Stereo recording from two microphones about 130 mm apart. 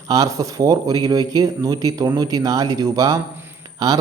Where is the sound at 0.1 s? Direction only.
25° right (ahead or behind).